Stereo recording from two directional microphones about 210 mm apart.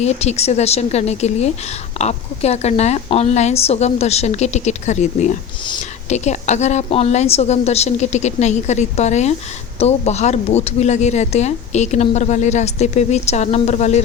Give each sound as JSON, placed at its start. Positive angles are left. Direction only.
{"t": 0.0, "sound": "speech", "side_deg": 30}